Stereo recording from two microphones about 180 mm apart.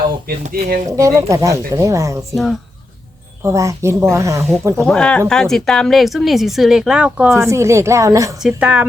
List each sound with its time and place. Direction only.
0.3 s speech: 50° right (ahead or behind)
0.9 s speech: 15° right (ahead or behind)
2.3 s speech: centre (ahead or behind)
3.4 s speech: 15° right (ahead or behind)
4.9 s speech: 5° left (ahead or behind); by 8.4 s 15° right (ahead or behind)
8.4 s speech: 5° right (ahead or behind)